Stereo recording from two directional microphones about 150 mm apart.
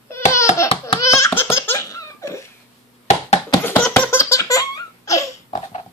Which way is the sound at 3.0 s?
50° left (ahead or behind).